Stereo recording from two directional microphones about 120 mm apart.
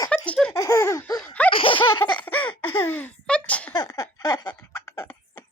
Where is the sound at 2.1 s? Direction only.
15° left (ahead or behind).